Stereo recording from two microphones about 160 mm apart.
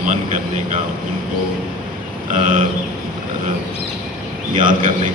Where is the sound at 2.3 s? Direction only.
55° right (ahead or behind).